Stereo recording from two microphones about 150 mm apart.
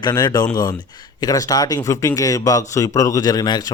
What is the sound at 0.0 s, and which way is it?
A man's voice, 30° left (ahead or behind).